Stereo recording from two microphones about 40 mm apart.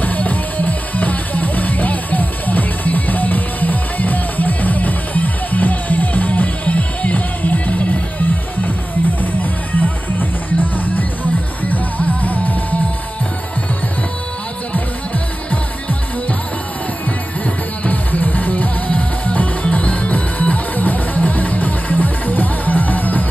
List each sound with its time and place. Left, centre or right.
0.0 s music: left
15.5 s music: left
17.8 s music: left